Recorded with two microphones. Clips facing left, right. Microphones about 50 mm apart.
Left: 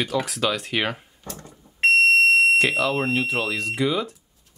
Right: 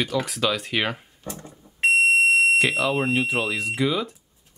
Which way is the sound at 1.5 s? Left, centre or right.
Centre.